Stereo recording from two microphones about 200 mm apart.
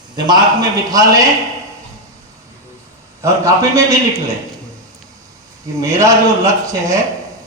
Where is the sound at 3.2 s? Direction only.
15° right (ahead or behind).